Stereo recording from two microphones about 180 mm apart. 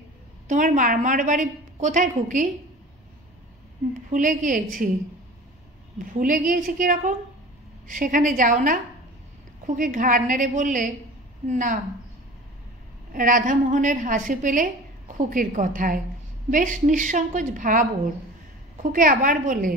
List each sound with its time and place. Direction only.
0.5 s a woman's voice: 45° right (ahead or behind)
4.1 s a woman's voice: 45° right (ahead or behind)
6.0 s a woman's voice: 50° right (ahead or behind)
13.1 s a woman's voice: 45° right (ahead or behind)